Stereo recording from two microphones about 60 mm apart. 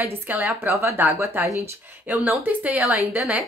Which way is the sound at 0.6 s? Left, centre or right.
Right.